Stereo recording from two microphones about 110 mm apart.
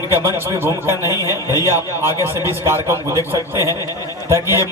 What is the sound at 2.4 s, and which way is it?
Speech, 20° right (ahead or behind).